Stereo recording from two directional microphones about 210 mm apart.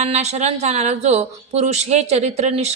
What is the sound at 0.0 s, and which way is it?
A woman's voice, 30° right (ahead or behind).